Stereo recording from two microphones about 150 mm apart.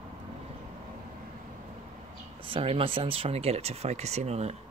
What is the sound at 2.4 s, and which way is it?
Speech, 40° right (ahead or behind).